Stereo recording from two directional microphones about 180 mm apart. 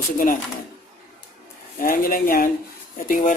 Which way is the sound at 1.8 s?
50° left (ahead or behind).